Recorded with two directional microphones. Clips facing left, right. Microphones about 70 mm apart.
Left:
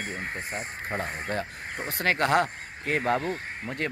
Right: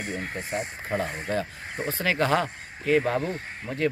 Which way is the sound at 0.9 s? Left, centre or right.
Left.